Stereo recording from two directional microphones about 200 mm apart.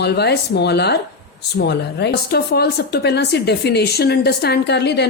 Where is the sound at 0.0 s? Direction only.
55° left (ahead or behind).